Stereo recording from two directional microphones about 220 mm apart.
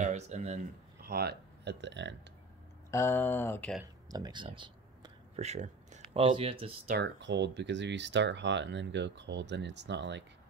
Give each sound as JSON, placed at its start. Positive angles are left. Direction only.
{"t": 0.0, "sound": "speech", "side_deg": -30}
{"t": 1.0, "sound": "speech", "side_deg": -45}
{"t": 2.9, "sound": "speech", "side_deg": 10}
{"t": 4.1, "sound": "speech", "side_deg": -20}
{"t": 6.9, "sound": "speech", "side_deg": -55}